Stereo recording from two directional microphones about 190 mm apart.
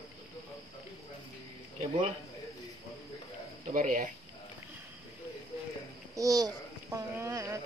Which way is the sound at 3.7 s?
45° right (ahead or behind).